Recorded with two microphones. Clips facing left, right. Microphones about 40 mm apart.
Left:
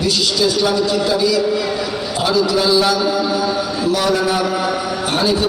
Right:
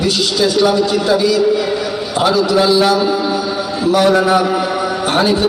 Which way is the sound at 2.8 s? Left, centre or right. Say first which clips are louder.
Right 3 dB; right.